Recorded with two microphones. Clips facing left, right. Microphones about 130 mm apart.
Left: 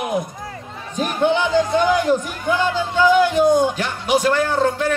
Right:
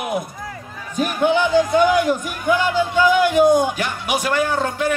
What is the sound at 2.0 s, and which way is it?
Music, 15° right (ahead or behind).